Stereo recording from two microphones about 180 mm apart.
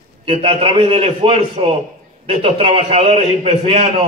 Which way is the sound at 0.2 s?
30° right (ahead or behind).